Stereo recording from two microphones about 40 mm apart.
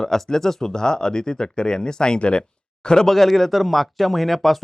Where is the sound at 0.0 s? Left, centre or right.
Centre.